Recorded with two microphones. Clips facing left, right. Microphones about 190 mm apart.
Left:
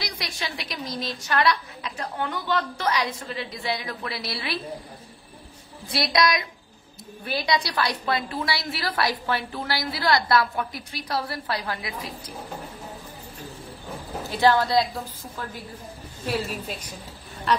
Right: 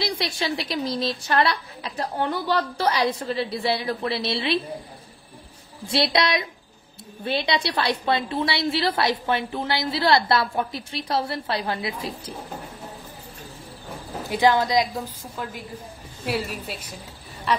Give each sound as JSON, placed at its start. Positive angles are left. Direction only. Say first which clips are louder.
{"t": 0.0, "sound": "a woman's voice", "louder": "right 7 dB", "side_deg": -30}
{"t": 5.9, "sound": "a woman's voice", "louder": "right 1 dB", "side_deg": -25}
{"t": 14.3, "sound": "speech", "louder": "right 1 dB", "side_deg": -15}